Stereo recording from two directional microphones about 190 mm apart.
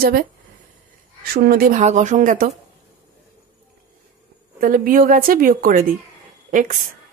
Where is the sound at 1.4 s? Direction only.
50° right (ahead or behind).